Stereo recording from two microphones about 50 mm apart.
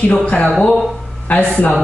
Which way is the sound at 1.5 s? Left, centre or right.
Left.